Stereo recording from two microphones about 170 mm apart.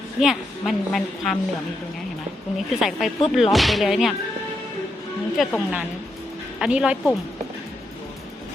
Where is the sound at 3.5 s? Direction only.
Centre (ahead or behind).